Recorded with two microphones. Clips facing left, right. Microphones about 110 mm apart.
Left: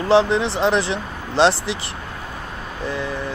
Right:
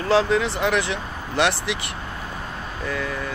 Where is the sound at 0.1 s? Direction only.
25° left (ahead or behind).